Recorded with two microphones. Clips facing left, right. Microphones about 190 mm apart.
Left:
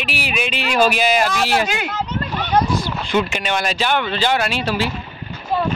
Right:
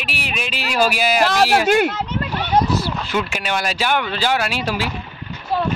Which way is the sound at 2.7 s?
5° right (ahead or behind).